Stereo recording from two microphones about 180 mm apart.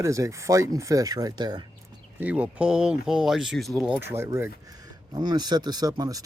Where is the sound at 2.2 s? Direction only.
10° right (ahead or behind).